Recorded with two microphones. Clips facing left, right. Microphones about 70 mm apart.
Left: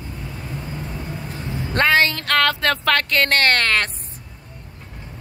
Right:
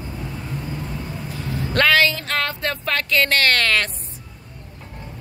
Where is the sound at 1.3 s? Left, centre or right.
Left.